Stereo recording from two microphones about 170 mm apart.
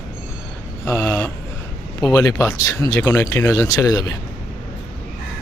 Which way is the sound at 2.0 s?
20° left (ahead or behind).